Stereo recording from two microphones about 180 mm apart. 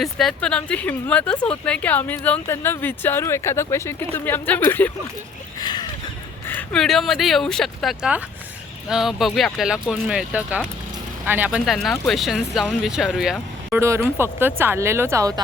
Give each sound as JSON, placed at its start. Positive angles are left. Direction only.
{"t": 0.0, "sound": "a woman's voice", "side_deg": 0}
{"t": 5.5, "sound": "a sound", "side_deg": 25}
{"t": 6.5, "sound": "speech", "side_deg": 5}
{"t": 13.7, "sound": "speech", "side_deg": -15}